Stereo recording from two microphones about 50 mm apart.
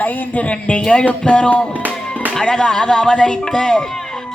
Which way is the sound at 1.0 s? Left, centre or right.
Left.